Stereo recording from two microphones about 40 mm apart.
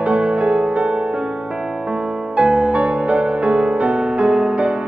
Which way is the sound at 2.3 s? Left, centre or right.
Right.